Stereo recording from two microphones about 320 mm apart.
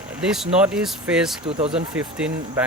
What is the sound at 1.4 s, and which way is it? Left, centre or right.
Speech, centre.